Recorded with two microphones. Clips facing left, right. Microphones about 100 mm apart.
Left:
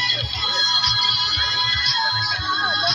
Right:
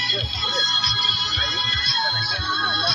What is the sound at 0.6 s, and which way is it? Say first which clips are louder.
Music: left 2 dB; 20° left (ahead or behind).